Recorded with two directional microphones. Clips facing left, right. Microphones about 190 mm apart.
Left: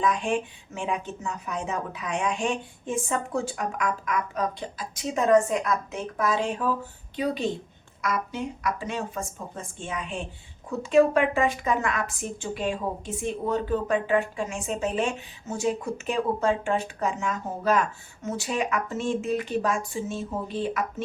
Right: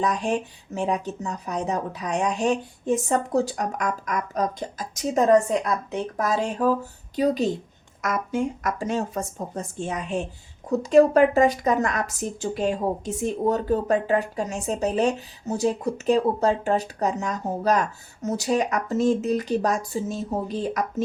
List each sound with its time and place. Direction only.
0.0 s speech: 40° right (ahead or behind)